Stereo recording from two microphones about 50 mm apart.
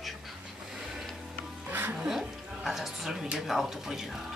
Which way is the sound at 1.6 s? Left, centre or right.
Right.